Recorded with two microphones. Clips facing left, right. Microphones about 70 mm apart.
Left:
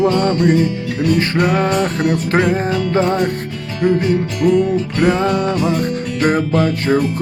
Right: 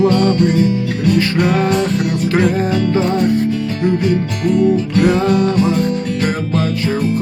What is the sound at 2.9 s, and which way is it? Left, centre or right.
Music, left.